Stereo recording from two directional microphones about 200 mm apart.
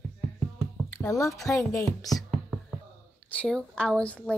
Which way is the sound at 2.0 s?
Centre (ahead or behind).